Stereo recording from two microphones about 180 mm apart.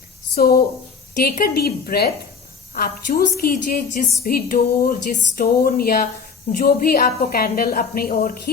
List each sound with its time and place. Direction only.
0.3 s a woman's voice: 55° left (ahead or behind)
4.2 s a sound: 55° left (ahead or behind)
6.5 s a woman's voice: 50° left (ahead or behind)